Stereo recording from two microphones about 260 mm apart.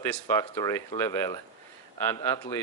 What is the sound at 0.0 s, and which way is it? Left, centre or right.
A man's voice, centre.